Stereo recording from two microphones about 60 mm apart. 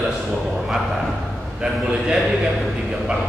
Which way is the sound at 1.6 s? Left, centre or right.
Centre.